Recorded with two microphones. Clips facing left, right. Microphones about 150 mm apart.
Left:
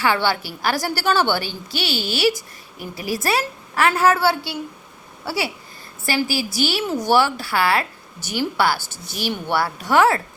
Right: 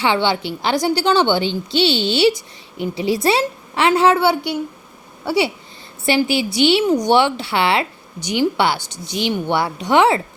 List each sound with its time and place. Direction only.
0.0 s a woman's voice: 20° right (ahead or behind)